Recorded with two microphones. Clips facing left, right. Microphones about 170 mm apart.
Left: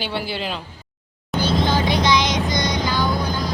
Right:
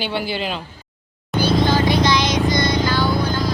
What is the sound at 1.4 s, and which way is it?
Music, 20° left (ahead or behind).